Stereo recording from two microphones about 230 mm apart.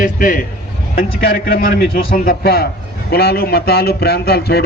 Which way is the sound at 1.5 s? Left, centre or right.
Left.